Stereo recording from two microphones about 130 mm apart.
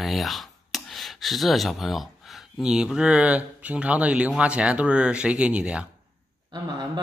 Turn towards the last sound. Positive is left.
turn(degrees=-35)  # may be behind; listen again after turning